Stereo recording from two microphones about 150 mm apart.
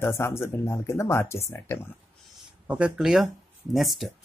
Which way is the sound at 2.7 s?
5° right (ahead or behind).